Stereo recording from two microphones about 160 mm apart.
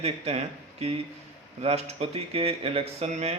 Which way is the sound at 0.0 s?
40° right (ahead or behind).